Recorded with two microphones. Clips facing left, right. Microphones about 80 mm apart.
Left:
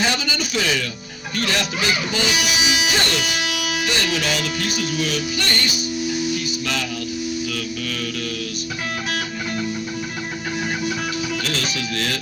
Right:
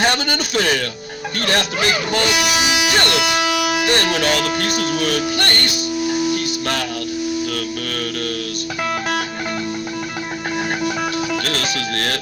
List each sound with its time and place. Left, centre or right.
0.0 s a man's voice: right
6.3 s music: right
7.5 s a man's voice: right
11.4 s a man's voice: right